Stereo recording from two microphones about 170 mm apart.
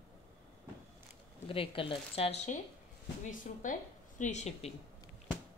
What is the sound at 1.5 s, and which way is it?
A woman's voice, 30° left (ahead or behind).